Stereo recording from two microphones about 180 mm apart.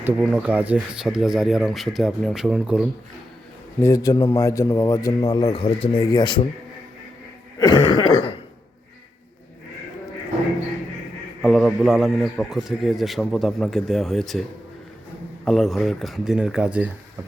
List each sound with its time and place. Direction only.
0.3 s a man's voice: 10° right (ahead or behind)
3.8 s a man's voice: 15° left (ahead or behind)
7.7 s a man's voice: 25° left (ahead or behind)
11.4 s a man's voice: centre (ahead or behind)
15.4 s a man's voice: centre (ahead or behind)